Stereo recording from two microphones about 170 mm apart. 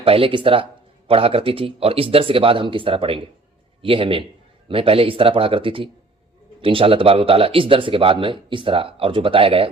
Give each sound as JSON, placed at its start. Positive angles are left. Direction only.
{"t": 0.0, "sound": "a man's voice", "side_deg": -35}